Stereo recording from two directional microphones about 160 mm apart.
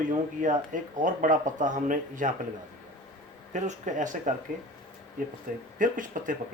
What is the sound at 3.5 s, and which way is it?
Speech, 50° right (ahead or behind).